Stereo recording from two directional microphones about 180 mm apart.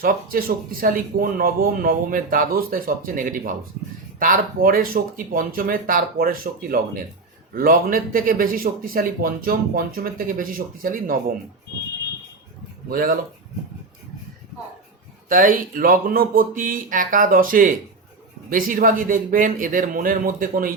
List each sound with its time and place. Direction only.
0.0 s speech: 55° right (ahead or behind)
12.9 s speech: 50° right (ahead or behind)
15.3 s speech: 50° right (ahead or behind)